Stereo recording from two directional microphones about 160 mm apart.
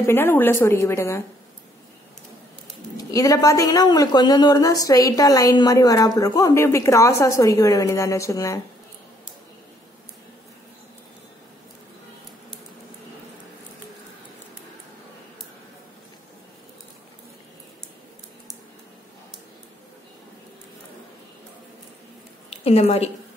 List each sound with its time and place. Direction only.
0.0 s a woman's voice: 15° left (ahead or behind)
3.0 s a woman's voice: 20° left (ahead or behind)
22.5 s a woman's voice: 40° left (ahead or behind)